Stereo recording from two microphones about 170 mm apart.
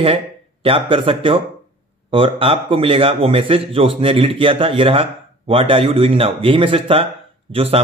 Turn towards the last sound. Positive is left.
turn(degrees=-35)  # may be behind; listen again after turning